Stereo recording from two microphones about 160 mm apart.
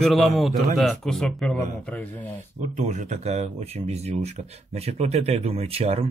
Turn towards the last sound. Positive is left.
turn(degrees=-40)  # may be behind; listen again after turning